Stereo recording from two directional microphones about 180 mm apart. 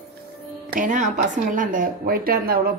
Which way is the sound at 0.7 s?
45° right (ahead or behind).